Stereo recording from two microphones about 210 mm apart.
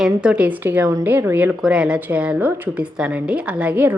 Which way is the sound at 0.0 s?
5° right (ahead or behind).